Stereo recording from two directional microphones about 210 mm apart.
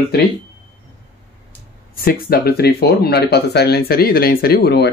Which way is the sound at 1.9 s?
45° left (ahead or behind).